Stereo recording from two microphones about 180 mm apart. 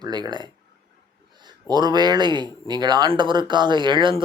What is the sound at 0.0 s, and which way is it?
A man's voice, 25° right (ahead or behind).